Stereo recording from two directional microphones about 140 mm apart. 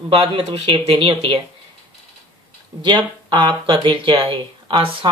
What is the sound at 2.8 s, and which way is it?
Speech, 35° right (ahead or behind).